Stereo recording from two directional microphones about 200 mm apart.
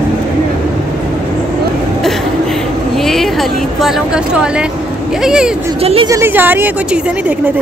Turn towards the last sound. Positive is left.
turn(degrees=-10)  # may be behind; listen again after turning